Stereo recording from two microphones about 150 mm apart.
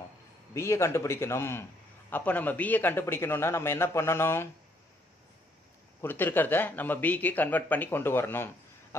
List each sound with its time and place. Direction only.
0.6 s a man's voice: 20° left (ahead or behind)
5.9 s a man's voice: 15° left (ahead or behind)